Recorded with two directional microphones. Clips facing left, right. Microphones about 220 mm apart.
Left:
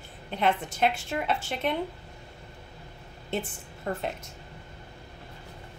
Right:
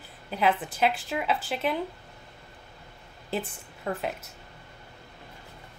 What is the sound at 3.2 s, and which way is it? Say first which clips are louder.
Speech: even; centre (ahead or behind).